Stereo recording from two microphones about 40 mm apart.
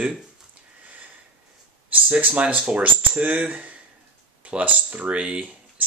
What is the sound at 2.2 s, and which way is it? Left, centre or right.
Speech, right.